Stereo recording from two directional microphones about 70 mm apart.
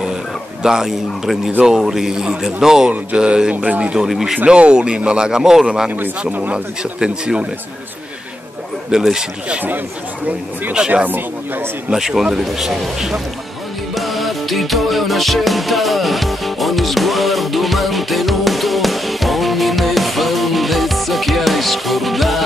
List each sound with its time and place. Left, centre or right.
0.6 s a man's voice: centre
2.9 s speech: centre
5.9 s speech: right
6.8 s speech: centre
8.9 s speech: centre
10.9 s speech: right
11.9 s a man's voice: centre
13.9 s music: centre